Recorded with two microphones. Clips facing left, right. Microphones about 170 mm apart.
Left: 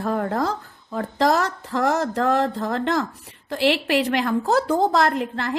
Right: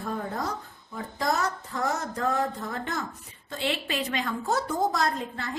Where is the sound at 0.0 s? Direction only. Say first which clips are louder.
Left 8 dB; 75° left (ahead or behind).